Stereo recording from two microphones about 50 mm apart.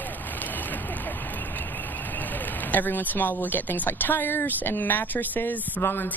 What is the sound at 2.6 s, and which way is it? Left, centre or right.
Speech, left.